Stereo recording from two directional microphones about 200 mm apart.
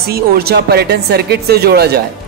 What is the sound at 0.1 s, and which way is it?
Speech, 50° right (ahead or behind).